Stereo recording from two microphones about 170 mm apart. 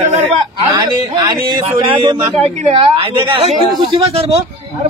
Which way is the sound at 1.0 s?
25° right (ahead or behind).